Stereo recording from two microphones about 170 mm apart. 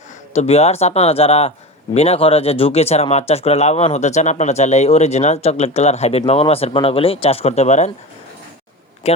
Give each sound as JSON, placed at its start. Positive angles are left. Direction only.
{"t": 0.3, "sound": "a man's voice", "side_deg": 40}
{"t": 9.0, "sound": "speech", "side_deg": 40}